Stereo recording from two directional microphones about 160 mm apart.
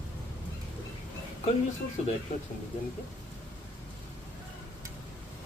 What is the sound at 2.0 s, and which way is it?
Speech, 45° left (ahead or behind).